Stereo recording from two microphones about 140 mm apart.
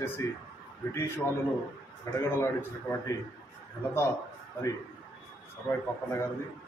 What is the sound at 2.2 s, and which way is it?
Speech, 20° left (ahead or behind).